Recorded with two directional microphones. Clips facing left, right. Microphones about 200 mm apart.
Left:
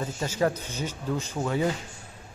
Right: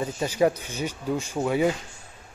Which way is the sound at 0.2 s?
15° right (ahead or behind).